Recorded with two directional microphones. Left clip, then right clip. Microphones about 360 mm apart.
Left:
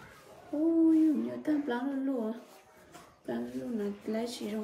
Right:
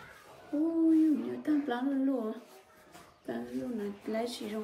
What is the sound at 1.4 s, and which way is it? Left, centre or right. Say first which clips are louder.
Speech: even; centre.